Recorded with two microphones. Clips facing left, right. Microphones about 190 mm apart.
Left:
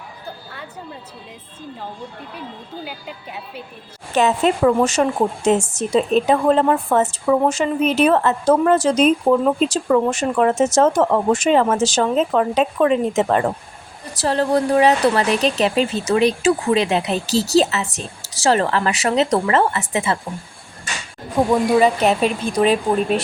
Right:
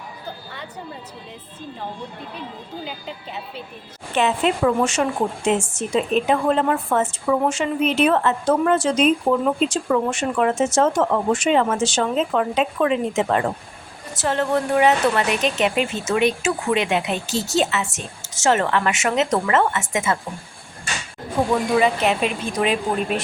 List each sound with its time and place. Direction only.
4.1 s speech: 40° left (ahead or behind)
21.4 s speech: 35° left (ahead or behind)